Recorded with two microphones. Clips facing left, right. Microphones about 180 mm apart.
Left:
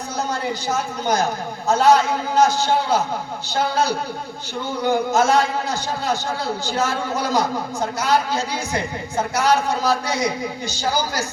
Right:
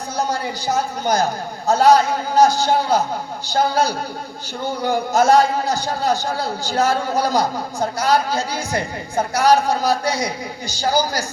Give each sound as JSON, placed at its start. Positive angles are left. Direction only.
{"t": 0.2, "sound": "a man's voice", "side_deg": -35}